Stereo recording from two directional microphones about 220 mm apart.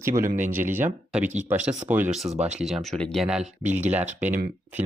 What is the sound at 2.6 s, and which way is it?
Speech, centre (ahead or behind).